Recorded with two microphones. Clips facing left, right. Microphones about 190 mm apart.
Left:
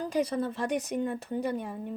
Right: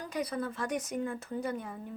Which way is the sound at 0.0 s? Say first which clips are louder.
Left 6 dB; 30° left (ahead or behind).